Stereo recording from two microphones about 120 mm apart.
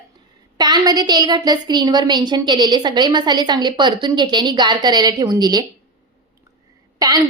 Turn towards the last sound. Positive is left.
turn(degrees=-30)  # may be behind; listen again after turning